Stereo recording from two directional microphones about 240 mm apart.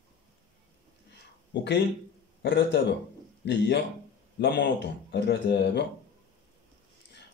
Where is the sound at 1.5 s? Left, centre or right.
Left.